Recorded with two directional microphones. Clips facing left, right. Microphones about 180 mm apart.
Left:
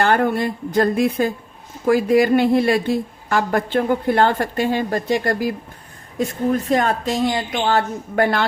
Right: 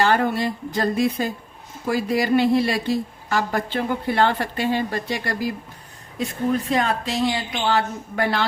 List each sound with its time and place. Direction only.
0.0 s a woman's voice: 50° left (ahead or behind)